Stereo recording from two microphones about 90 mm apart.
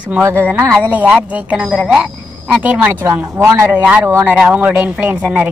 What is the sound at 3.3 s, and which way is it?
Speech, 30° right (ahead or behind).